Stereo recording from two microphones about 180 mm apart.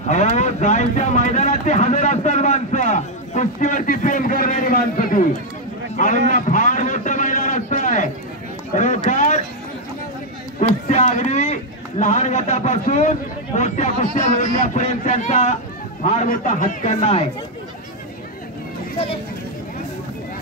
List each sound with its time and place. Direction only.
0.1 s a man's voice: 40° left (ahead or behind)
10.6 s a man's voice: 40° left (ahead or behind)
14.3 s a man's voice: 45° left (ahead or behind)